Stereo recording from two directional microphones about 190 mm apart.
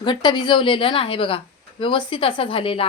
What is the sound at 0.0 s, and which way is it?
Speech, 25° left (ahead or behind).